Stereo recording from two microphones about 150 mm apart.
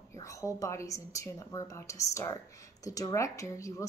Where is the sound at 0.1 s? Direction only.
20° left (ahead or behind).